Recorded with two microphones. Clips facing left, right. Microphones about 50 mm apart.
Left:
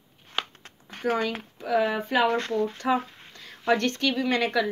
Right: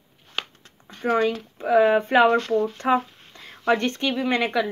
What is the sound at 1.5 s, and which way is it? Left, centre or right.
Speech, right.